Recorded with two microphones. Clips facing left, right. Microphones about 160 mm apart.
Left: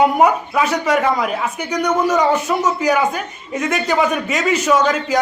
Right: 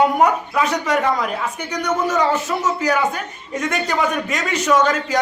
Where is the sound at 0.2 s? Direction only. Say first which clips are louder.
Left 2 dB; 5° left (ahead or behind).